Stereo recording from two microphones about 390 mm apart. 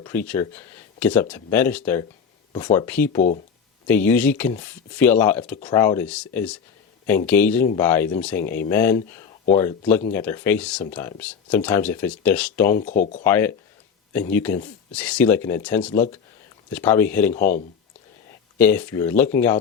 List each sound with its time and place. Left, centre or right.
0.0 s speech: centre
3.2 s speech: centre
3.8 s speech: centre
12.8 s speech: centre
13.2 s speech: centre
18.5 s speech: centre